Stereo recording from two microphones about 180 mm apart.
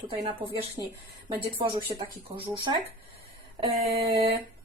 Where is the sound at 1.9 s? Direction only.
35° right (ahead or behind).